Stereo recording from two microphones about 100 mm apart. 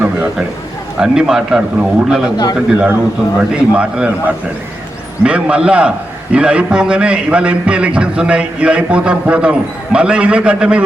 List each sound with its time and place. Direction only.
0.0 s a sound: 10° right (ahead or behind)
0.9 s a man's voice: 5° right (ahead or behind)
5.2 s a man's voice: 10° right (ahead or behind)